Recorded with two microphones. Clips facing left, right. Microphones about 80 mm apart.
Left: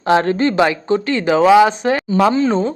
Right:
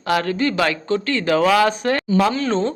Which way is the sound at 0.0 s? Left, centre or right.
Left.